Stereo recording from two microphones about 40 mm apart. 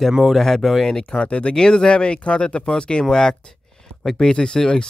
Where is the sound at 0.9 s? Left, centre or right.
Left.